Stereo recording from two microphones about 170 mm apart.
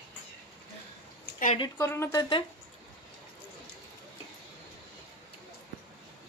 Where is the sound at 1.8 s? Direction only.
15° left (ahead or behind).